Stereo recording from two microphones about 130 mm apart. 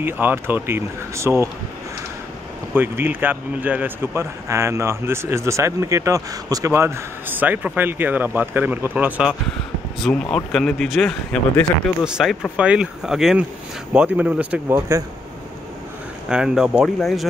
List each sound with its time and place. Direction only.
0.0 s a man's voice: 15° right (ahead or behind)
2.7 s a man's voice: 15° right (ahead or behind)
10.3 s a man's voice: 5° left (ahead or behind)
16.3 s speech: 5° right (ahead or behind)